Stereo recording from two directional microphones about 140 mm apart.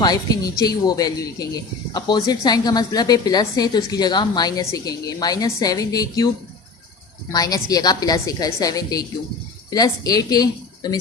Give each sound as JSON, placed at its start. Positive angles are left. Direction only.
{"t": 0.0, "sound": "a woman's voice", "side_deg": 25}